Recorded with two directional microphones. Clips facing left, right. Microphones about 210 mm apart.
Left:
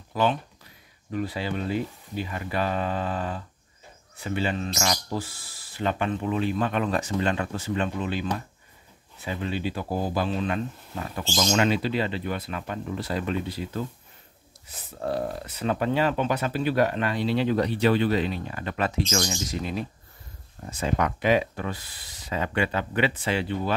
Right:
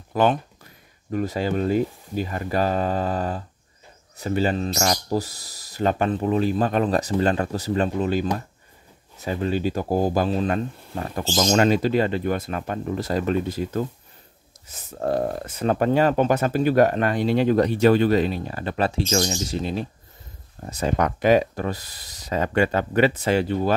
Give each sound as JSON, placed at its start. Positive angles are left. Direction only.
{"t": 0.1, "sound": "speech", "side_deg": -50}